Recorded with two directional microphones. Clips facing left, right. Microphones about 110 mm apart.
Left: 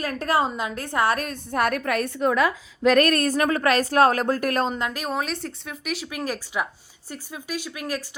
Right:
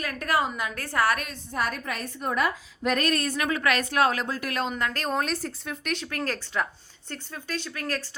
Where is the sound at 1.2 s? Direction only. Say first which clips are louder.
Left 6 dB; 55° left (ahead or behind); by 2.4 s 85° left.